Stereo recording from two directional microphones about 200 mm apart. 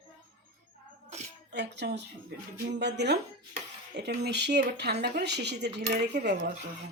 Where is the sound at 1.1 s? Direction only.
35° right (ahead or behind).